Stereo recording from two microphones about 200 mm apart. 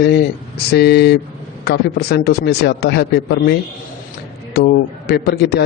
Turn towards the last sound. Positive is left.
turn(degrees=55)  # may be behind; listen again after turning